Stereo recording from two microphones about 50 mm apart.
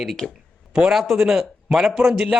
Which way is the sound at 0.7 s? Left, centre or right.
Centre.